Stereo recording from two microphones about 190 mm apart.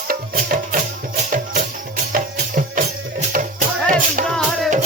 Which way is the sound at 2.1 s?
45° right (ahead or behind).